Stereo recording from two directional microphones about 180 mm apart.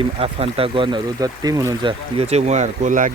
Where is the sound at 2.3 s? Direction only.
40° right (ahead or behind).